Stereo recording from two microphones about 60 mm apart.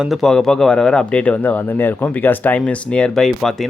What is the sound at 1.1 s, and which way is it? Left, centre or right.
Speech, left.